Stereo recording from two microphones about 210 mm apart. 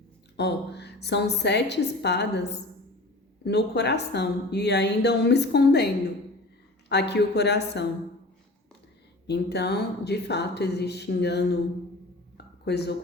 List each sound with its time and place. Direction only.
0.3 s speech: 55° left (ahead or behind)
3.4 s speech: 55° left (ahead or behind)
9.2 s speech: 50° left (ahead or behind)
12.6 s speech: 50° left (ahead or behind)